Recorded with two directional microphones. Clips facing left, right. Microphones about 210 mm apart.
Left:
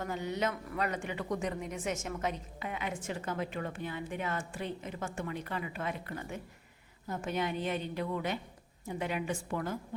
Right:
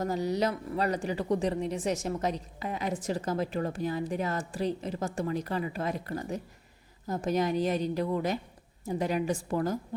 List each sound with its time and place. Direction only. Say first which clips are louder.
0.0 s speech: right 6 dB; 35° right (ahead or behind)